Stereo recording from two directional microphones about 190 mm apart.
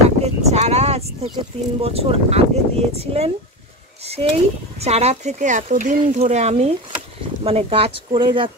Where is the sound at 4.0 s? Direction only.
30° right (ahead or behind).